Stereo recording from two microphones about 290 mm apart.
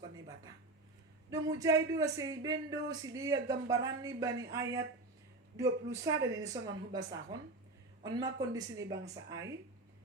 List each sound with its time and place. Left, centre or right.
1.3 s speech: centre